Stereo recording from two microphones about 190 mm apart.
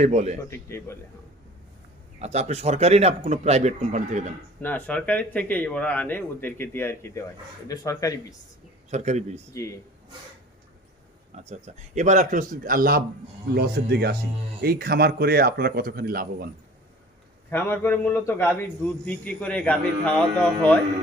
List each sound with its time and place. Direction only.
0.0 s a man's voice: 35° right (ahead or behind)
0.5 s a man's voice: 15° left (ahead or behind)
2.1 s a man's voice: 35° right (ahead or behind)
4.6 s a man's voice: 10° left (ahead or behind)
8.9 s a man's voice: 35° right (ahead or behind)
9.5 s a man's voice: 15° left (ahead or behind)
11.3 s a man's voice: 35° right (ahead or behind)
17.5 s a man's voice: 10° left (ahead or behind)